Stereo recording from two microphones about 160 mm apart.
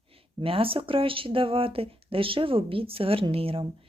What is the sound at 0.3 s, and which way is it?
Speech, 35° right (ahead or behind).